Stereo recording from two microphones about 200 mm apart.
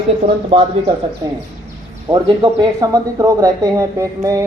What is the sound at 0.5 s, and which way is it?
Speech, 30° right (ahead or behind).